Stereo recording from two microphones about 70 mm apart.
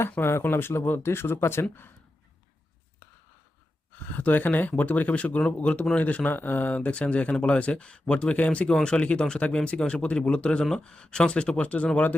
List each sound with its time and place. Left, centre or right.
0.2 s speech: left
4.2 s speech: left